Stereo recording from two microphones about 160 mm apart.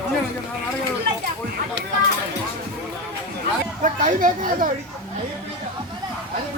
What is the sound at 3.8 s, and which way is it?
Speech, 55° right (ahead or behind).